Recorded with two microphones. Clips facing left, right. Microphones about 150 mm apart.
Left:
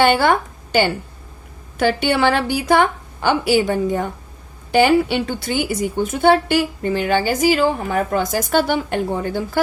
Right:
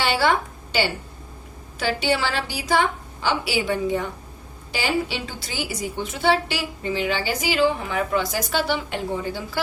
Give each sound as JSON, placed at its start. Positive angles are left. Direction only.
{"t": 0.0, "sound": "a woman's voice", "side_deg": 55}
{"t": 4.7, "sound": "a woman's voice", "side_deg": 55}